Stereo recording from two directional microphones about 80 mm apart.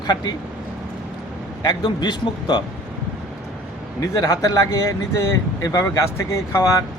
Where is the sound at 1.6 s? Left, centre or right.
Left.